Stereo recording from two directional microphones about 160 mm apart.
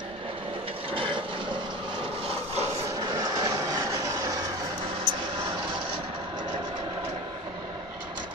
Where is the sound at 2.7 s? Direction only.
20° right (ahead or behind).